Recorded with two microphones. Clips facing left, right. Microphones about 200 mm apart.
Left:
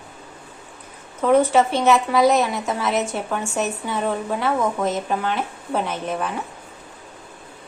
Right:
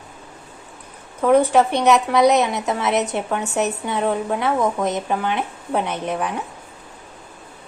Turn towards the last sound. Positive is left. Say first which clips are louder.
# right 2 dB
turn(degrees=-20)  # may be behind; listen again after turning